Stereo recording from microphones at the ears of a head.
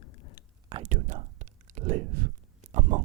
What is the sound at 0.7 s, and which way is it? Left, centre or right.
Speech, right.